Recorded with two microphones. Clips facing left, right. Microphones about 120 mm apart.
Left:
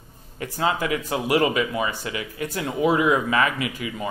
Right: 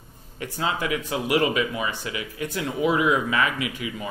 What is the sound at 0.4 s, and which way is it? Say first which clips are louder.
Speech: left 3 dB; 40° left (ahead or behind).